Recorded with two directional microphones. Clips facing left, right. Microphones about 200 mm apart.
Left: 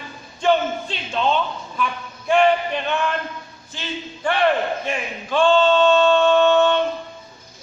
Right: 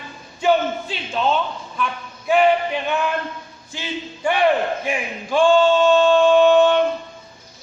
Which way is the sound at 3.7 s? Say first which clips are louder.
Right 2 dB; 10° right (ahead or behind).